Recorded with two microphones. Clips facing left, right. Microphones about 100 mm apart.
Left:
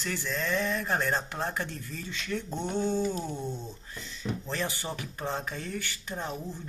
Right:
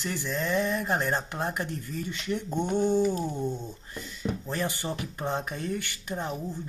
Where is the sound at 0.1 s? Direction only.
15° right (ahead or behind).